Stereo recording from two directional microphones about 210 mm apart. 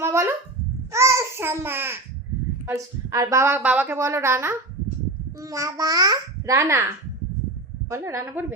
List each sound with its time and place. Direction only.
0.0 s dog: 10° right (ahead or behind)
0.9 s babbling: 15° right (ahead or behind)
2.6 s a woman's voice: 15° right (ahead or behind)